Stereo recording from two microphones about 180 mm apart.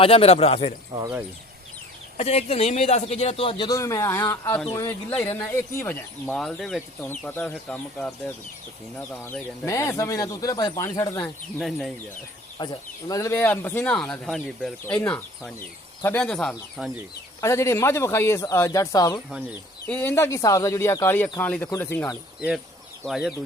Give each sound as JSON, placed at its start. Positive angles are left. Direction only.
{"t": 0.0, "sound": "a man's voice", "side_deg": 35}
{"t": 0.9, "sound": "speech", "side_deg": -35}
{"t": 2.1, "sound": "a man's voice", "side_deg": 35}
{"t": 12.6, "sound": "speech", "side_deg": 25}
{"t": 17.4, "sound": "speech", "side_deg": 15}
{"t": 23.0, "sound": "speech", "side_deg": 0}